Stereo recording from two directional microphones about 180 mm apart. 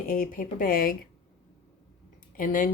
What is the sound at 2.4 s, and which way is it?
Speech, 50° left (ahead or behind).